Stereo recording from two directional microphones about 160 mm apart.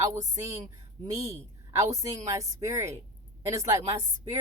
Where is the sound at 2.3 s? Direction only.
20° right (ahead or behind).